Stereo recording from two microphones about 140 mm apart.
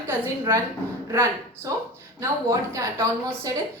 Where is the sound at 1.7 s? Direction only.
20° right (ahead or behind).